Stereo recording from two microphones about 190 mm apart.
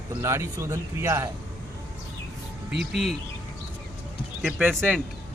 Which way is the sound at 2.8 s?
Centre (ahead or behind).